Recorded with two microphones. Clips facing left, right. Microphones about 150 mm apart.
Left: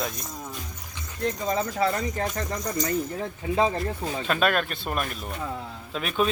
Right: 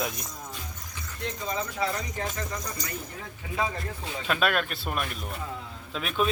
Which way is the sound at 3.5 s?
35° left (ahead or behind).